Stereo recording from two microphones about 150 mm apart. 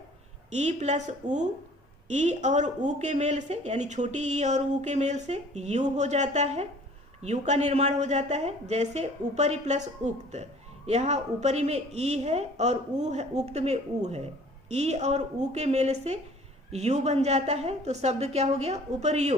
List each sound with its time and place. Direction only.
0.5 s a woman's voice: 50° right (ahead or behind)